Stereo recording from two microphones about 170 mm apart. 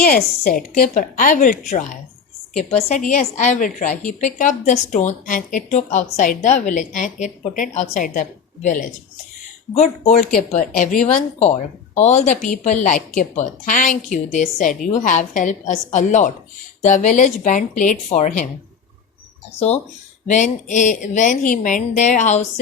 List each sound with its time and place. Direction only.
0.0 s a woman's voice: 60° left (ahead or behind)
2.6 s a woman's voice: 40° left (ahead or behind)
10.1 s a woman's voice: 50° left (ahead or behind)
19.5 s a woman's voice: 40° left (ahead or behind)